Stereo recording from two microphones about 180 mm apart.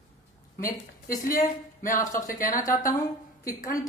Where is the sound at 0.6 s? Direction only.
50° left (ahead or behind).